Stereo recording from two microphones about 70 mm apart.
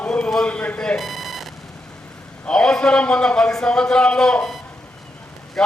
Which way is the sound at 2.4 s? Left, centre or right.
Centre.